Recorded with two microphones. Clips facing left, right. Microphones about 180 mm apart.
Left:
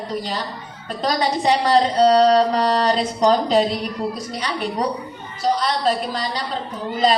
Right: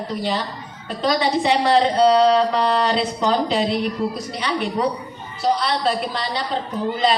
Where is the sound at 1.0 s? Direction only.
40° left (ahead or behind).